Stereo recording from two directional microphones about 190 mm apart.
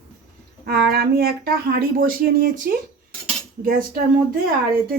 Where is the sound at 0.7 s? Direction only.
55° right (ahead or behind).